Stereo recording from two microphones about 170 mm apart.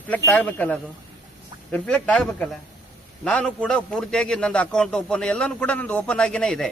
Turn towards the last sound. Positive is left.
turn(degrees=5)  # may be behind; listen again after turning